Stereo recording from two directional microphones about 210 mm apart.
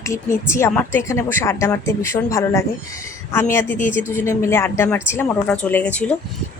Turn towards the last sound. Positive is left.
turn(degrees=5)  # may be behind; listen again after turning